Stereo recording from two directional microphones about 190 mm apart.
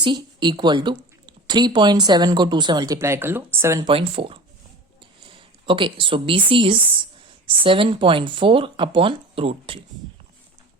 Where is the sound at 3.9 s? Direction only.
30° right (ahead or behind).